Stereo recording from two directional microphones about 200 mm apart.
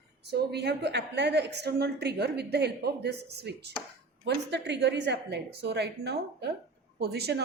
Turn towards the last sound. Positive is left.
turn(degrees=-55)  # may be behind; listen again after turning